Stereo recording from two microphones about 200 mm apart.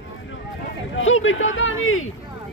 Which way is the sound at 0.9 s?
75° left (ahead or behind).